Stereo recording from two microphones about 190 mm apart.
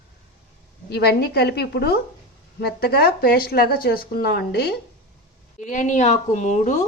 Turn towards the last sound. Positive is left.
turn(degrees=40)  # may be behind; listen again after turning